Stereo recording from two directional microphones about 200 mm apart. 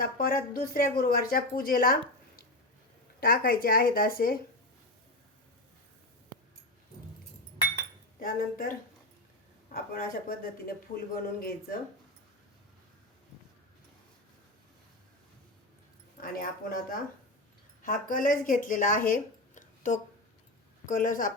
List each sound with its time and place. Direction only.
0.0 s speech: 45° left (ahead or behind)
3.2 s speech: 50° left (ahead or behind)
8.2 s speech: 45° left (ahead or behind)
16.2 s a woman's voice: 45° left (ahead or behind)